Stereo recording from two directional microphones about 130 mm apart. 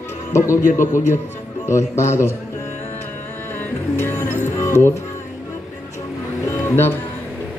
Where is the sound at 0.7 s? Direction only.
20° left (ahead or behind).